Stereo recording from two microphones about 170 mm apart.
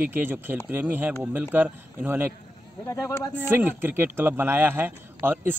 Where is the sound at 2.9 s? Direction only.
15° left (ahead or behind).